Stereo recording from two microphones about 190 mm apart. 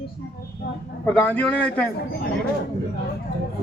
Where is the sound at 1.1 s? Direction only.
5° left (ahead or behind).